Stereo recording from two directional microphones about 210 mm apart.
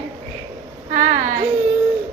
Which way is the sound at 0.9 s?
40° right (ahead or behind).